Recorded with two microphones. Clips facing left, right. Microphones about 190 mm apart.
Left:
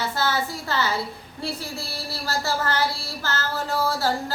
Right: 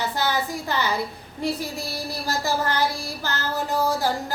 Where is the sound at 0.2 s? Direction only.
15° right (ahead or behind).